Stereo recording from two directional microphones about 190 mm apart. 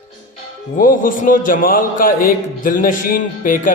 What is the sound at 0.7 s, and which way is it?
Speech, 45° left (ahead or behind).